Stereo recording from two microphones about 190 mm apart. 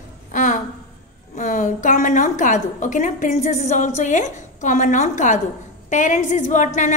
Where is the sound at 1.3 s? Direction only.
40° left (ahead or behind).